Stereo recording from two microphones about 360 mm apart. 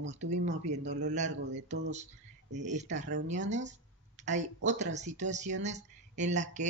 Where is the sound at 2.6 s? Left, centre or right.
Centre.